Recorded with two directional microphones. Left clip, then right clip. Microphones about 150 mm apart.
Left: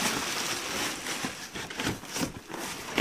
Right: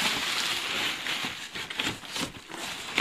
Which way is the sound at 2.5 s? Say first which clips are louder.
Even; 50° left (ahead or behind).